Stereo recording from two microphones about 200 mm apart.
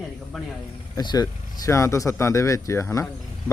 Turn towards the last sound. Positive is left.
turn(degrees=15)  # may be behind; listen again after turning